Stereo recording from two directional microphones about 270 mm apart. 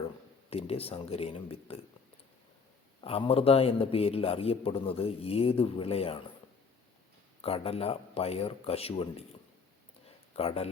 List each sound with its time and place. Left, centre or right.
0.5 s a man's voice: left
3.0 s a man's voice: left
7.4 s a man's voice: left
10.3 s a man's voice: left